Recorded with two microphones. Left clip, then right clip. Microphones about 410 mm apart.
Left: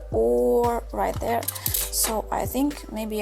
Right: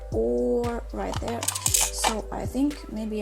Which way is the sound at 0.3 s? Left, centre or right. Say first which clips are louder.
Left 6 dB; left.